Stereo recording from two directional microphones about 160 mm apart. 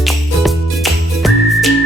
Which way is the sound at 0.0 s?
Centre (ahead or behind).